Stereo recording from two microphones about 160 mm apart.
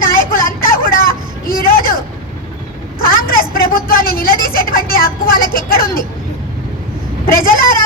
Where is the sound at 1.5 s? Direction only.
65° left (ahead or behind).